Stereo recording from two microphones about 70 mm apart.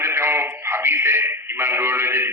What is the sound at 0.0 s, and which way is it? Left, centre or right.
Radio, right.